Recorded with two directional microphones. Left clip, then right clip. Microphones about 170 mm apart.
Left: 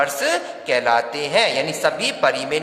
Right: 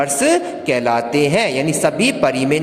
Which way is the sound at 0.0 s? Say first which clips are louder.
Right 4 dB; 15° right (ahead or behind).